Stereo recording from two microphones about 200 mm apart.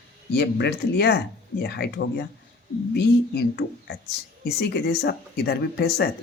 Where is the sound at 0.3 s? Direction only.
55° left (ahead or behind).